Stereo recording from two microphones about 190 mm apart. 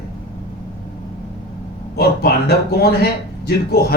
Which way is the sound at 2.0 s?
55° left (ahead or behind).